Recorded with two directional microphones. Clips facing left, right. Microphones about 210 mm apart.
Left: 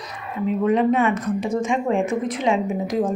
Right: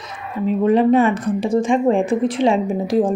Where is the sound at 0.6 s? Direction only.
30° right (ahead or behind).